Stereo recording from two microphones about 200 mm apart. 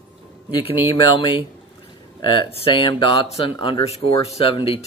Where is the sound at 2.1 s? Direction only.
25° left (ahead or behind).